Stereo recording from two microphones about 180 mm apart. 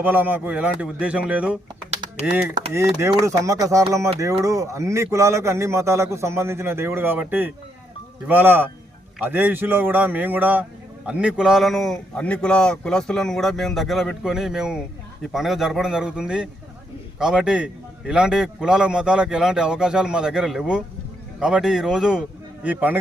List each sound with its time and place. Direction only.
0.0 s a man's voice: 10° right (ahead or behind)
2.7 s a man's voice: 15° right (ahead or behind)